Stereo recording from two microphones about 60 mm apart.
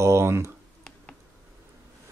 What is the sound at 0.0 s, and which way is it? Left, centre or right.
Speech, right.